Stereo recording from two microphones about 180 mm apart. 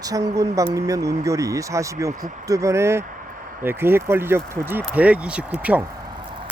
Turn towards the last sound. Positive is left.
turn(degrees=-5)  # may be behind; listen again after turning